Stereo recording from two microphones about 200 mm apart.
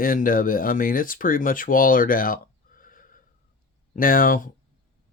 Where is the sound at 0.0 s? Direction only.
45° left (ahead or behind).